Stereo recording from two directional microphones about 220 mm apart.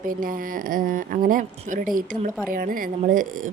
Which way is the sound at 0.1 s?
40° right (ahead or behind).